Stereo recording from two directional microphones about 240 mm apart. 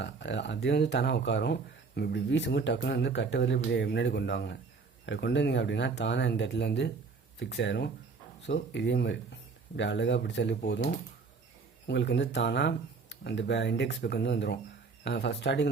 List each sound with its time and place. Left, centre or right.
0.0 s speech: left